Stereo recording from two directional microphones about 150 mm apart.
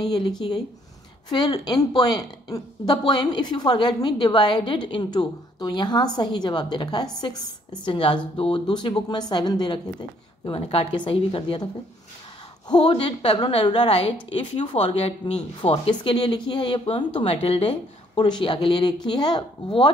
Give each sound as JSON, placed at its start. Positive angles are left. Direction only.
{"t": 0.0, "sound": "a woman's voice", "side_deg": 25}